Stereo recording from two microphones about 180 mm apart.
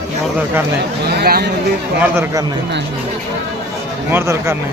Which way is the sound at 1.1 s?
60° right (ahead or behind).